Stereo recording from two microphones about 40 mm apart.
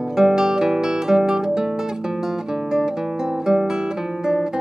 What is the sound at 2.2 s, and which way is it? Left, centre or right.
Guitar, centre.